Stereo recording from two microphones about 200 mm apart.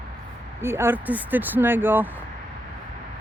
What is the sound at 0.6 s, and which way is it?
Speech, 10° right (ahead or behind).